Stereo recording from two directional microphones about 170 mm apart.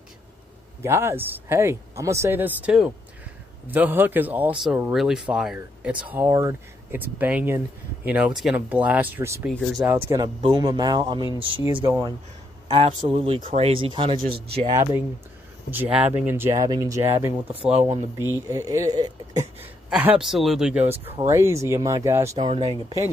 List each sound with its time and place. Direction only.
0.8 s speech: 15° right (ahead or behind)
6.1 s speech: 15° right (ahead or behind)
9.5 s speech: centre (ahead or behind)
10.1 s speech: 25° right (ahead or behind)
11.7 s speech: 10° right (ahead or behind)
12.6 s speech: 35° right (ahead or behind)
15.7 s speech: 10° right (ahead or behind)
17.6 s speech: 35° right (ahead or behind)
17.8 s speech: 15° right (ahead or behind)
19.9 s speech: 5° right (ahead or behind); by 23.0 s 25° right (ahead or behind)